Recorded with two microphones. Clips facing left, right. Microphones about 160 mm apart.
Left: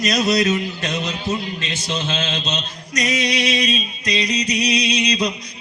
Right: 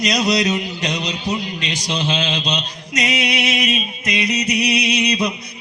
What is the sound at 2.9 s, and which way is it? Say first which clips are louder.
Music: even; 25° right (ahead or behind).